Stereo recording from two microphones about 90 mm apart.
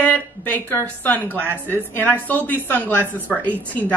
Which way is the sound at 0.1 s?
20° left (ahead or behind).